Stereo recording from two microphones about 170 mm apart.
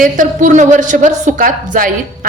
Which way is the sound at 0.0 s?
50° right (ahead or behind).